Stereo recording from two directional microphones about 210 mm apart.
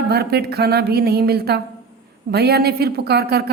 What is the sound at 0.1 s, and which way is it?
A woman's voice, 50° right (ahead or behind).